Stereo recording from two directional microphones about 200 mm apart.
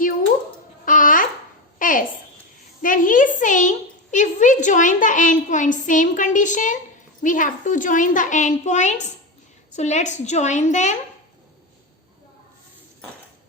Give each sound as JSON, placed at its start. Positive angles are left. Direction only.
{"t": 0.9, "sound": "babbling", "side_deg": 40}
{"t": 1.8, "sound": "a sound", "side_deg": 40}
{"t": 2.8, "sound": "a woman's voice", "side_deg": 40}